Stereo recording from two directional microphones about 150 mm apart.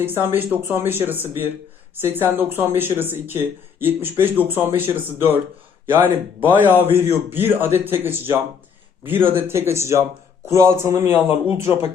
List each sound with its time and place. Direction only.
0.0 s speech: 15° right (ahead or behind)
6.5 s a man's voice: 15° right (ahead or behind)